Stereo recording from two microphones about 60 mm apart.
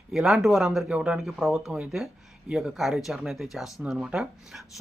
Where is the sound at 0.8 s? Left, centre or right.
Centre.